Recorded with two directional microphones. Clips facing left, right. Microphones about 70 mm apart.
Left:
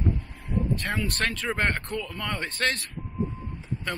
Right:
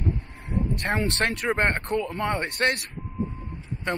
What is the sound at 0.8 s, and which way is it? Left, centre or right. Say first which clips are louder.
Speech: right 3 dB; right.